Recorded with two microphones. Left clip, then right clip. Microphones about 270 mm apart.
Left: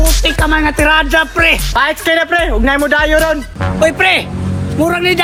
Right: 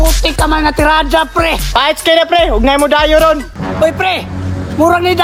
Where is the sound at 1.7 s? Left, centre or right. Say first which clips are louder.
Right 2 dB; right.